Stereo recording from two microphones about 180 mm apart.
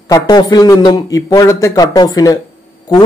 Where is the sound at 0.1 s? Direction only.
20° left (ahead or behind).